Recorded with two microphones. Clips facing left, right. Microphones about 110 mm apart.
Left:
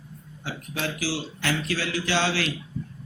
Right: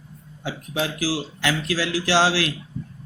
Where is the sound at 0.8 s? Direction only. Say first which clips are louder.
Right 4 dB; 90° right.